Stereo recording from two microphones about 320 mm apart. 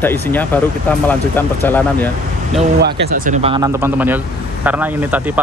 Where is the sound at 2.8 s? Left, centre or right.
Right.